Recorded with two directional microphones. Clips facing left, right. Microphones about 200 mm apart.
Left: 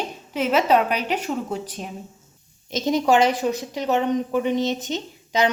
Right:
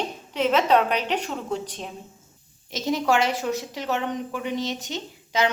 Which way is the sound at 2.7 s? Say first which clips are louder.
Left 4 dB; 20° left (ahead or behind).